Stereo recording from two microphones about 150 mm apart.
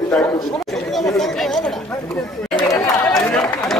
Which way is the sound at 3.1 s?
5° left (ahead or behind).